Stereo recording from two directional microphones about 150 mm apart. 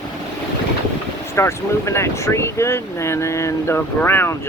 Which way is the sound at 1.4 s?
20° left (ahead or behind).